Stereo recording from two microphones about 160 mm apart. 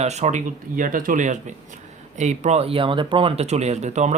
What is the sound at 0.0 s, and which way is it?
Speech, 45° right (ahead or behind).